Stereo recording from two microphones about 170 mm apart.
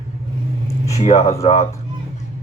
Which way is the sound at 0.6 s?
20° left (ahead or behind).